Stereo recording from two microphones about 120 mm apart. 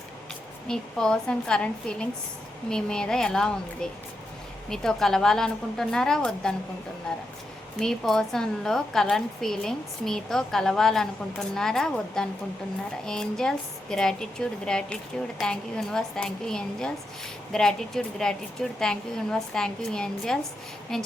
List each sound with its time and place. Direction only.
0.7 s a woman's voice: 5° left (ahead or behind)